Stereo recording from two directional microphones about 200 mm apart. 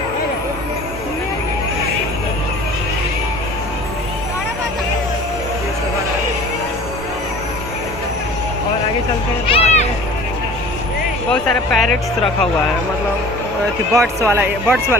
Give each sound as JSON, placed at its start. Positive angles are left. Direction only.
{"t": 9.5, "sound": "a sound", "side_deg": 30}
{"t": 11.3, "sound": "music", "side_deg": 5}
{"t": 13.9, "sound": "speech", "side_deg": -15}